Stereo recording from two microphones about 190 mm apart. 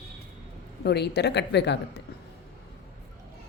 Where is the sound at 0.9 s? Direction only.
60° left (ahead or behind).